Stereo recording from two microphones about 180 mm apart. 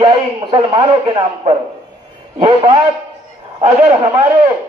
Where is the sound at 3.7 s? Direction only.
10° right (ahead or behind).